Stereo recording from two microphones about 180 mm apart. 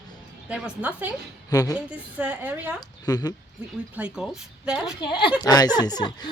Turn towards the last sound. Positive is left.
turn(degrees=25)  # may be behind; listen again after turning